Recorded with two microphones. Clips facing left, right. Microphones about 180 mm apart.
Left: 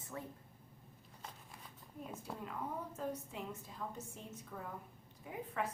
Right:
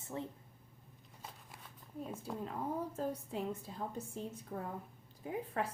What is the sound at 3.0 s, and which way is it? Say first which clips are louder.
A woman's voice: right 4 dB; 35° right (ahead or behind).